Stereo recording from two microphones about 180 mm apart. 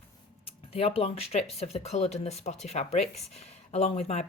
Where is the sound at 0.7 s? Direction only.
35° left (ahead or behind).